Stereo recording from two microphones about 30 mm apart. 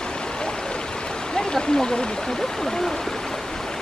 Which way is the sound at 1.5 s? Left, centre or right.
Centre.